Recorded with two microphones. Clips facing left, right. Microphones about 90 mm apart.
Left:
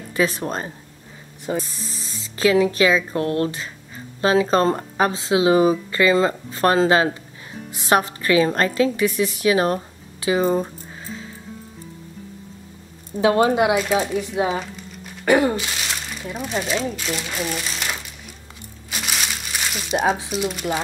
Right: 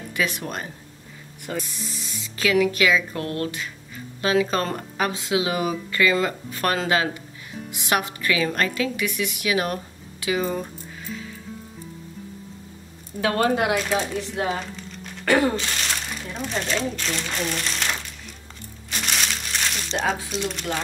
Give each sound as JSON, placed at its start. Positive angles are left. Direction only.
{"t": 0.1, "sound": "speech", "side_deg": 35}
{"t": 10.2, "sound": "music", "side_deg": 30}
{"t": 13.2, "sound": "speech", "side_deg": 20}
{"t": 13.8, "sound": "speech", "side_deg": 5}
{"t": 18.9, "sound": "music", "side_deg": 5}
{"t": 20.2, "sound": "speech", "side_deg": 5}